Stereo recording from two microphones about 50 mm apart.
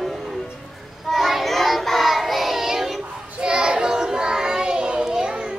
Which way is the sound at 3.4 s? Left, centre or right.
Centre.